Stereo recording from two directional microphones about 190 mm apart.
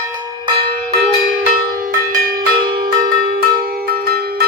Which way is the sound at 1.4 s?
45° right (ahead or behind).